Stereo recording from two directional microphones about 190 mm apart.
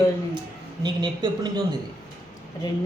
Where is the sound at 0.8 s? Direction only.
25° right (ahead or behind).